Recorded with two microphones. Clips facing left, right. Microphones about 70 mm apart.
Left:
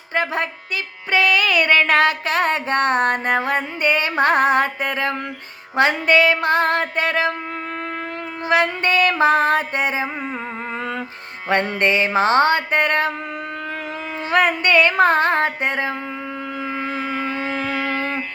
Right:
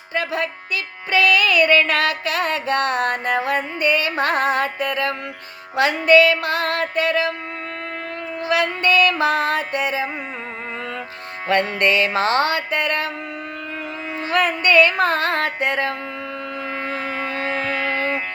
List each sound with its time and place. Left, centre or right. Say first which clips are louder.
0.1 s music: left 2 dB; left
1.1 s a sound: right 1 dB; left
8.4 s a sound: left 1 dB; left
11.4 s music: even; left
14.3 s music: left 1 dB; left
16.8 s shofar: left 1 dB; right
17.3 s music: even; right